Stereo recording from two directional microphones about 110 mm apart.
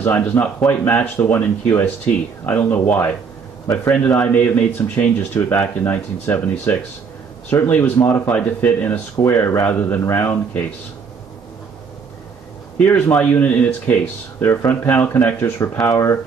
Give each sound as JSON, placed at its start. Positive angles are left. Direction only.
{"t": 0.0, "sound": "a man's voice", "side_deg": 15}
{"t": 12.7, "sound": "a man's voice", "side_deg": 15}